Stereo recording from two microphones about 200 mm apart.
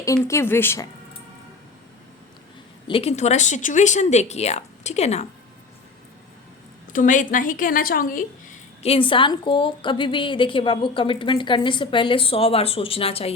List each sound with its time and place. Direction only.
0.0 s speech: 15° left (ahead or behind)
2.8 s speech: 30° left (ahead or behind)
6.9 s a woman's voice: 40° left (ahead or behind)